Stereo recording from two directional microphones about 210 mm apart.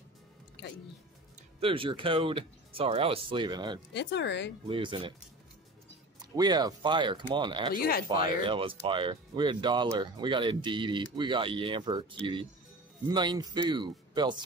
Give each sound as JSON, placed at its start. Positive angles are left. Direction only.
{"t": 1.6, "sound": "speech", "side_deg": -25}
{"t": 3.9, "sound": "speech", "side_deg": 55}
{"t": 4.6, "sound": "speech", "side_deg": -25}
{"t": 6.3, "sound": "speech", "side_deg": -20}
{"t": 7.7, "sound": "speech", "side_deg": 45}
{"t": 8.4, "sound": "speech", "side_deg": -25}